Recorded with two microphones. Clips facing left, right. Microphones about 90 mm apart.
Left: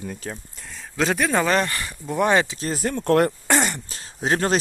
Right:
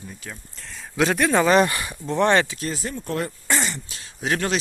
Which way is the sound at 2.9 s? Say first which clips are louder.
Left 9 dB; 70° left (ahead or behind).